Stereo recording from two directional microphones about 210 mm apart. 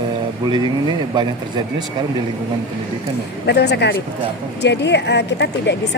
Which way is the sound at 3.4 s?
50° left (ahead or behind).